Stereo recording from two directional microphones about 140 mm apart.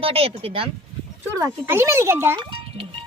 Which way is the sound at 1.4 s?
20° right (ahead or behind).